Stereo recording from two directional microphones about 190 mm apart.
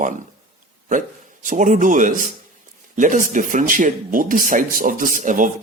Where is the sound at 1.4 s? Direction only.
40° right (ahead or behind).